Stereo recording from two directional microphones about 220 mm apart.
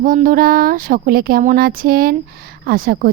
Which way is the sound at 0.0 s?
40° right (ahead or behind).